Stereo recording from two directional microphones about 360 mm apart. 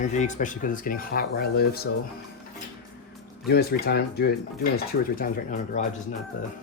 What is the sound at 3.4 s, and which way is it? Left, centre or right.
Speech, left.